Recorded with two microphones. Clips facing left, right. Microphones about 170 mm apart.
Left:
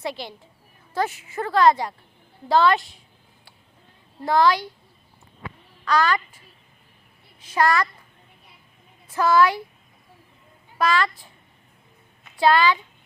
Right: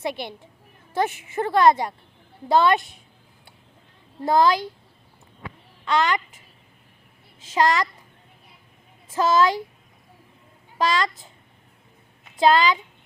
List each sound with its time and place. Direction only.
0.0 s a woman's voice: 20° right (ahead or behind)
4.2 s a woman's voice: 25° right (ahead or behind)
5.8 s a child's voice: 25° right (ahead or behind)
7.5 s a child's voice: 20° right (ahead or behind)
9.1 s a woman's voice: 25° right (ahead or behind)
10.8 s a woman's voice: 20° right (ahead or behind)
12.4 s a woman's voice: 20° right (ahead or behind)